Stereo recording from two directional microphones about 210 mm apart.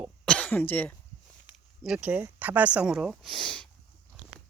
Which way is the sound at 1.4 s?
5° right (ahead or behind).